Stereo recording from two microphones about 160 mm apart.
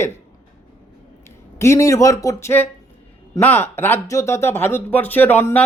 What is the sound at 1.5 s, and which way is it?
Speech, 15° left (ahead or behind).